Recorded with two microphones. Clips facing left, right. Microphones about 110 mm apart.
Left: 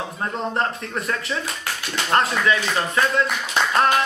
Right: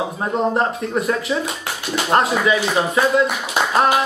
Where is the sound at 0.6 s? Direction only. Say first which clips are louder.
Right 5 dB; 5° right (ahead or behind).